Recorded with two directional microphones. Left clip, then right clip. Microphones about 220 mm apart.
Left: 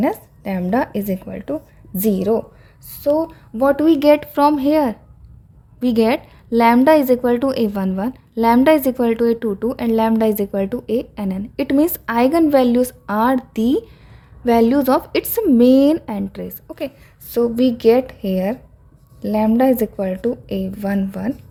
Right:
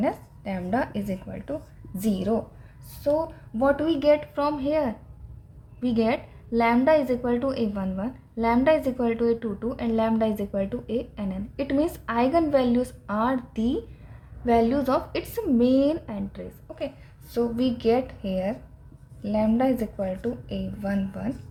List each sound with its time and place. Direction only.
0.0 s a woman's voice: 45° left (ahead or behind)